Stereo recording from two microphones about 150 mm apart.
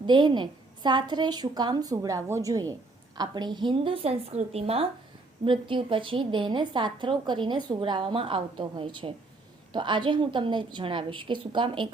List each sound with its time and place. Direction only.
0.0 s a woman's voice: 30° right (ahead or behind)